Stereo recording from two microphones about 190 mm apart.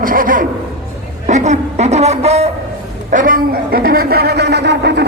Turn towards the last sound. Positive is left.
turn(degrees=-65)  # may be behind; listen again after turning